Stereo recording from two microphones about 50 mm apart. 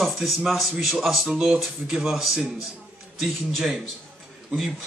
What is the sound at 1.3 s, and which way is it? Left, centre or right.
Speech, centre.